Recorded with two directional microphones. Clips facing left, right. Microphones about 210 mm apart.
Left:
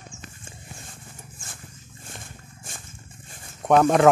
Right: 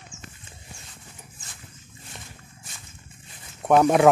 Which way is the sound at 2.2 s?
50° left (ahead or behind).